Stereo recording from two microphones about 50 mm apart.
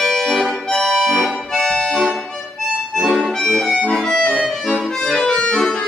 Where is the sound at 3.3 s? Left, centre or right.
Centre.